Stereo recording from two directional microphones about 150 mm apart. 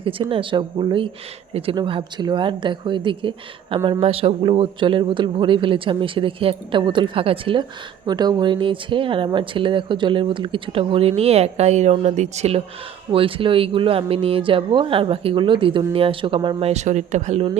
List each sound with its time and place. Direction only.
0.0 s a man's voice: 35° right (ahead or behind)